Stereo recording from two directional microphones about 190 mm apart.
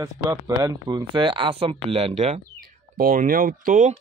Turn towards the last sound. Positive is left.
turn(degrees=-45)  # may be behind; listen again after turning